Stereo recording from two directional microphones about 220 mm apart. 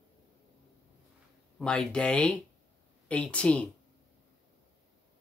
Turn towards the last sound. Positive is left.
turn(degrees=5)  # may be behind; listen again after turning